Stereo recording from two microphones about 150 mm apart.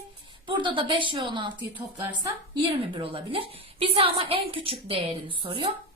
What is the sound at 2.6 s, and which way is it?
A woman's voice, 35° right (ahead or behind).